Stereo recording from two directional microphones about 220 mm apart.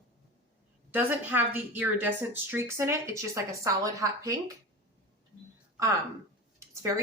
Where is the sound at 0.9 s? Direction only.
10° right (ahead or behind).